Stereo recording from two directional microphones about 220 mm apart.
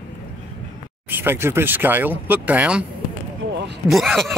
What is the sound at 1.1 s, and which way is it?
Speech, 10° right (ahead or behind).